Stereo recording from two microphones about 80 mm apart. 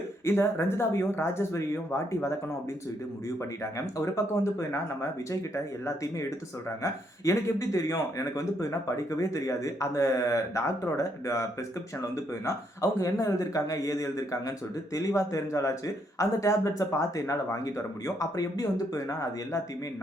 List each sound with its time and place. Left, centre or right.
0.3 s a man's voice: left
3.6 s a man's voice: left
5.3 s a man's voice: left